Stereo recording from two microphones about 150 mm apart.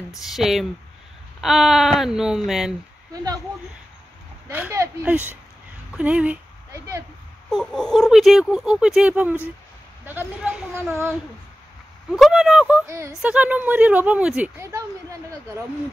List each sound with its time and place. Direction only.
0.2 s speech: centre (ahead or behind)
4.5 s speech: 10° right (ahead or behind)
5.9 s speech: 10° right (ahead or behind)
7.5 s speech: centre (ahead or behind); by 11.1 s 15° right (ahead or behind)
12.1 s speech: 5° right (ahead or behind)
12.8 s speech: 20° right (ahead or behind)
13.2 s speech: 10° right (ahead or behind)
14.6 s speech: 20° right (ahead or behind)